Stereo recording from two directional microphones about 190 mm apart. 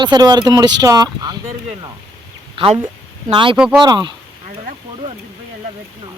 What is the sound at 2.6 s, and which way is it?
Speech, 30° right (ahead or behind).